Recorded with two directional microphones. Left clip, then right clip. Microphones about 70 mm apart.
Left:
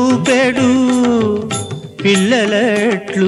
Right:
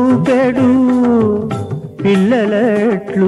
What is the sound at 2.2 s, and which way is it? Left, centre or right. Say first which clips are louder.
Music: even; right.